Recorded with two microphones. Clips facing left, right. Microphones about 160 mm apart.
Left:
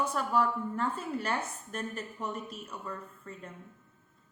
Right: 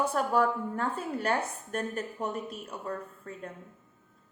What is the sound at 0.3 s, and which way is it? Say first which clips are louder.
Speech: even; 55° right (ahead or behind).